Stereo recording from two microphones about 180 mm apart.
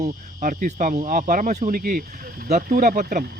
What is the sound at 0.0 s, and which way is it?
Speech, 40° right (ahead or behind).